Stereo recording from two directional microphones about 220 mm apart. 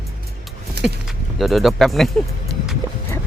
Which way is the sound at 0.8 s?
50° right (ahead or behind).